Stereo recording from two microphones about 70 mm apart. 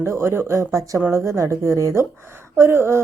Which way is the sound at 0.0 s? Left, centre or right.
Right.